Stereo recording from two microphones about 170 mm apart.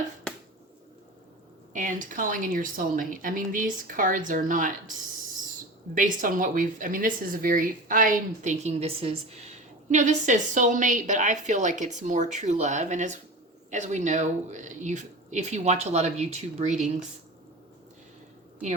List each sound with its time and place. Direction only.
0.3 s finger snapping: 5° left (ahead or behind)
1.7 s speech: 50° right (ahead or behind)
5.9 s speech: 50° right (ahead or behind)